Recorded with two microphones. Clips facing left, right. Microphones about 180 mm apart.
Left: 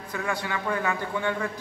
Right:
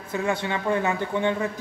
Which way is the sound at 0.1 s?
25° right (ahead or behind).